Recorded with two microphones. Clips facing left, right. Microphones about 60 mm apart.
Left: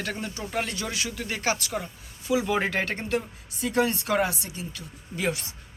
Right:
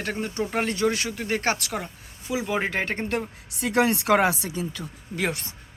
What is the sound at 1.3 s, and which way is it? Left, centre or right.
Speech, right.